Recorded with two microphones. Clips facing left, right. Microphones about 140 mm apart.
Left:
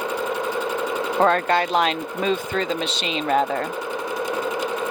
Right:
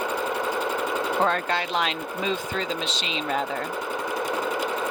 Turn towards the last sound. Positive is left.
turn(degrees=55)  # may be behind; listen again after turning